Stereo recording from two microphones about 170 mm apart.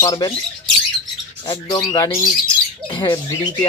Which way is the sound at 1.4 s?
25° left (ahead or behind).